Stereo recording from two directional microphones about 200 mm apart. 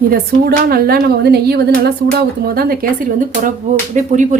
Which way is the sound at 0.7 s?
50° right (ahead or behind).